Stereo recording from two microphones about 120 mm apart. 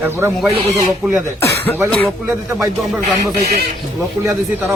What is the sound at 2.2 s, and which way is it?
Speech, 20° right (ahead or behind).